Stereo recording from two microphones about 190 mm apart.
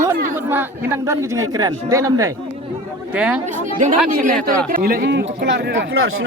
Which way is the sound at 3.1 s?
5° right (ahead or behind).